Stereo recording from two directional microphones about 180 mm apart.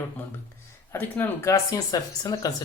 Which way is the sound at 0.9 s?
10° left (ahead or behind).